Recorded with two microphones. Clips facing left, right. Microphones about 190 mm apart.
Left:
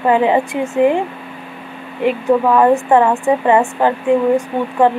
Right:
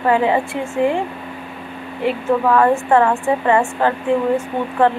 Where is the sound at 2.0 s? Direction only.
15° left (ahead or behind).